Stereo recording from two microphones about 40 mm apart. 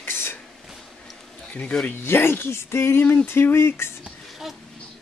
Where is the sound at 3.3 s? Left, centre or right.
Left.